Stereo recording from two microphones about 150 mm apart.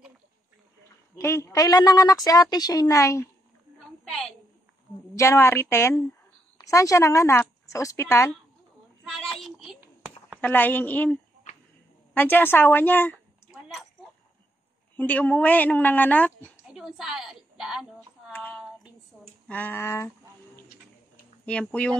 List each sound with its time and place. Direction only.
1.1 s a woman's voice: 15° left (ahead or behind)
4.1 s a woman's voice: 5° left (ahead or behind)
5.1 s a woman's voice: 20° left (ahead or behind)
9.0 s child singing: 5° left (ahead or behind)
9.8 s a sound: 10° right (ahead or behind)
10.4 s a woman's voice: 10° left (ahead or behind)
13.5 s a sound: centre (ahead or behind)
15.0 s a woman's voice: 10° left (ahead or behind)
16.7 s a woman's voice: centre (ahead or behind)
18.3 s a sound: 10° left (ahead or behind)
19.4 s a woman's voice: 10° left (ahead or behind)